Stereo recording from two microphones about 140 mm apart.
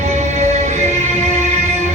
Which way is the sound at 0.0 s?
55° right (ahead or behind).